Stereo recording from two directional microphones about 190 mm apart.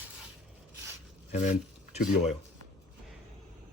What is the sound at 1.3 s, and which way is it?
Speech, 40° left (ahead or behind).